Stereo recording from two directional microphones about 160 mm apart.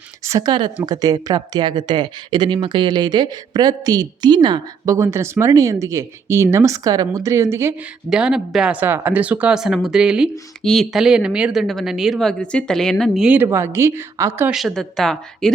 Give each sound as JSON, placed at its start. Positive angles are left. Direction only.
{"t": 0.3, "sound": "speech", "side_deg": -25}
{"t": 8.1, "sound": "speech", "side_deg": -5}
{"t": 14.5, "sound": "speech", "side_deg": 0}